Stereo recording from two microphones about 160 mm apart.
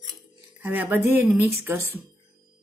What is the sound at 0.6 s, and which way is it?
Speech, 10° right (ahead or behind).